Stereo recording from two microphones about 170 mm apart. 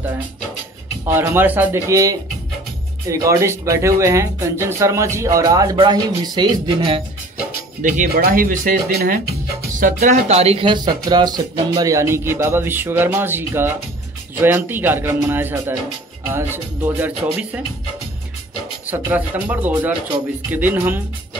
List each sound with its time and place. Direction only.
1.0 s speech: 10° right (ahead or behind)
7.8 s speech: 55° right (ahead or behind); by 17.6 s 10° right (ahead or behind)
18.9 s speech: 10° right (ahead or behind)